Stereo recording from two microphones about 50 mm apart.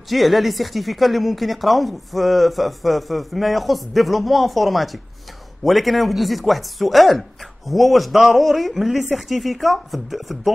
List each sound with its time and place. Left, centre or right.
0.1 s speech: centre